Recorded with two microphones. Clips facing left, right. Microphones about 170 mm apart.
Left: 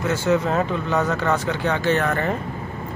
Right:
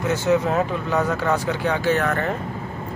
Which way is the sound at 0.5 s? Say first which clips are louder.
Even; 5° right (ahead or behind).